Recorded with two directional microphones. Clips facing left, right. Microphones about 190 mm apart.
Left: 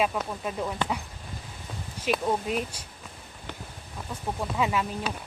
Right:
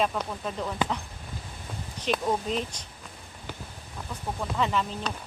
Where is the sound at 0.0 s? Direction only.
5° left (ahead or behind).